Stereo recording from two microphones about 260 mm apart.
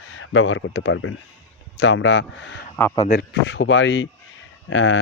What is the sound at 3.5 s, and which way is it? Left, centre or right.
Speech, left.